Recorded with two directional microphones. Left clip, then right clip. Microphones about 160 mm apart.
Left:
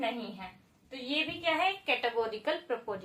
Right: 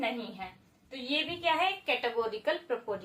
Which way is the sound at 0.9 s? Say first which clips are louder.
Right 1 dB; 15° left (ahead or behind).